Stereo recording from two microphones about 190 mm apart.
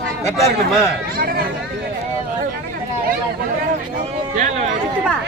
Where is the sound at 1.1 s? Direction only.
50° right (ahead or behind).